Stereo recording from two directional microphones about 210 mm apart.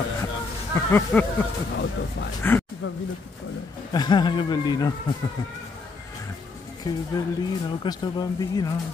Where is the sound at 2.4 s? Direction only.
10° left (ahead or behind).